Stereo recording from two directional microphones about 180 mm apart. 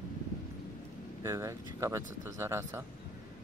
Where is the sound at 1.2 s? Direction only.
15° right (ahead or behind).